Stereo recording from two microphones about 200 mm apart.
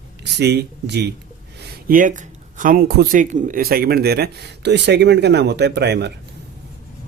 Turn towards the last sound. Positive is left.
turn(degrees=-55)  # may be behind; listen again after turning